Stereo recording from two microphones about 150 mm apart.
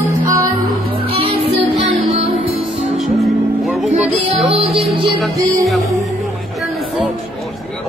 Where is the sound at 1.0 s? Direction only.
40° right (ahead or behind).